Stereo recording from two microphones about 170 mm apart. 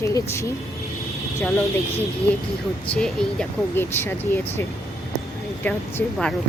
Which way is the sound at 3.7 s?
15° left (ahead or behind).